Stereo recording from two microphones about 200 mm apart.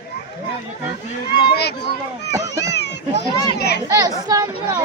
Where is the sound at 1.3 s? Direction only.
55° left (ahead or behind).